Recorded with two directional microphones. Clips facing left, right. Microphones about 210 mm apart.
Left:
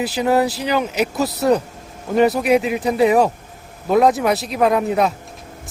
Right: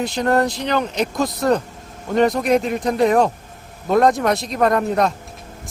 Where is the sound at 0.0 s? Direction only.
5° left (ahead or behind).